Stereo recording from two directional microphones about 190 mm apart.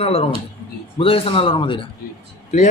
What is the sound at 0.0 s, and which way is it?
Speech, 30° left (ahead or behind).